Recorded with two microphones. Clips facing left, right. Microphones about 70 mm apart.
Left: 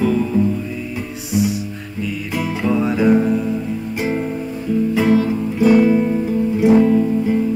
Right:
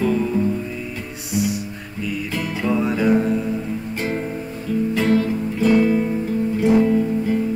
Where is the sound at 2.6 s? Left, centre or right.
Centre.